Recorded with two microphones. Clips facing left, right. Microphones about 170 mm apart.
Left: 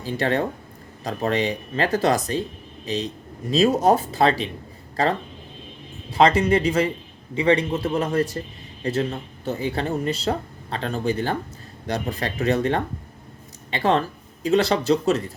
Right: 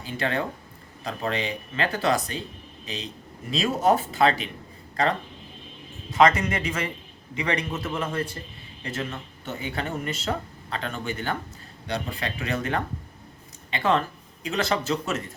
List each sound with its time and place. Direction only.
0.0 s speech: 35° left (ahead or behind)